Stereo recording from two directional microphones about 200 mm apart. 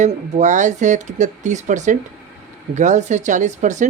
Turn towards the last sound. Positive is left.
turn(degrees=-35)  # may be behind; listen again after turning